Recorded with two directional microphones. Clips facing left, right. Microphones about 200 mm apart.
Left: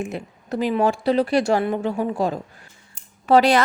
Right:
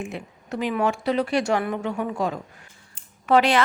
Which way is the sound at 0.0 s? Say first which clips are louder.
Left 4 dB; 35° left (ahead or behind).